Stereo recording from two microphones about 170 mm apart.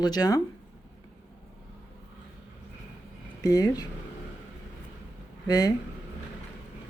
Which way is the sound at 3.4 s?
20° left (ahead or behind).